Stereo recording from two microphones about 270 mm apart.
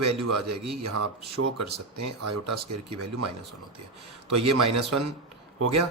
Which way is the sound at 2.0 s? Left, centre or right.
Right.